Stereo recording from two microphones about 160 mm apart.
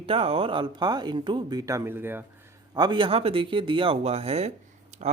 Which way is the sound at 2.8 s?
30° right (ahead or behind).